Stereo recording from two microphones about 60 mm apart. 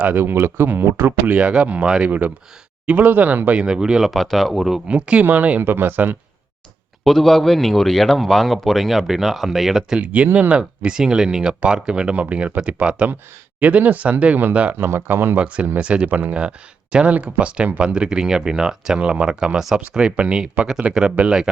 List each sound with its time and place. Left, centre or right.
0.0 s speech: right
1.3 s speech: centre
3.6 s speech: centre
4.1 s speech: centre
4.9 s speech: centre
5.6 s speech: right
7.0 s speech: centre
10.0 s speech: right
14.8 s speech: right
15.4 s speech: right